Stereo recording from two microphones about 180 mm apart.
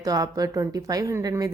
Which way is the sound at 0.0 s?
20° right (ahead or behind).